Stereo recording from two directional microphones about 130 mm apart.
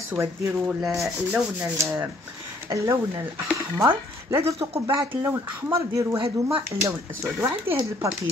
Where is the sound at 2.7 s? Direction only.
25° right (ahead or behind).